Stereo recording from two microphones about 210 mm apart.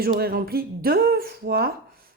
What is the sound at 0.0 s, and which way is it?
Speech, 45° right (ahead or behind).